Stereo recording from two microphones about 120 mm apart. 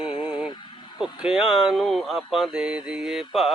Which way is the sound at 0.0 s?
45° left (ahead or behind).